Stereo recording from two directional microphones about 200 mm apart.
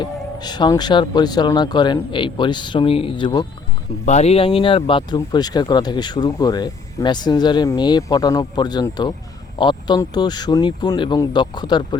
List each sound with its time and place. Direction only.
0.0 s speech: 20° left (ahead or behind)